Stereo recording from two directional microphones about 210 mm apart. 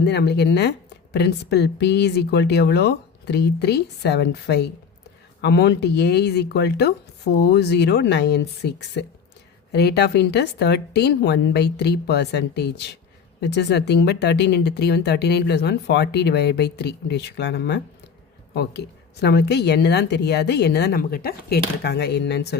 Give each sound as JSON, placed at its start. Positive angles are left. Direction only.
{"t": 0.0, "sound": "speech", "side_deg": 50}